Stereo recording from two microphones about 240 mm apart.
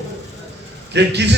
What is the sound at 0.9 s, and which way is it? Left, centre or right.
Speech, right.